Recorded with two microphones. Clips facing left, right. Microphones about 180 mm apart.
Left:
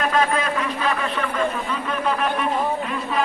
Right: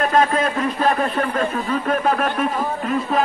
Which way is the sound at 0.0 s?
45° right (ahead or behind).